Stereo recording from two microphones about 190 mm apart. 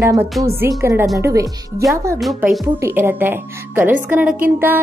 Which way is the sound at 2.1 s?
Centre (ahead or behind).